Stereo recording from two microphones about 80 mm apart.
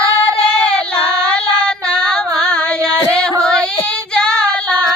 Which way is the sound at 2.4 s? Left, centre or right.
Centre.